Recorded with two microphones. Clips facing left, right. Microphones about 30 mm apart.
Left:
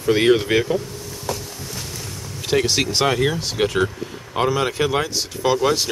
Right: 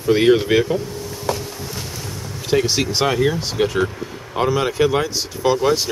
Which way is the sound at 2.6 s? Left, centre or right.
Centre.